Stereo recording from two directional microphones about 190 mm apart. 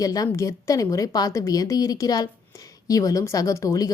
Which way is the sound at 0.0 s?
20° left (ahead or behind).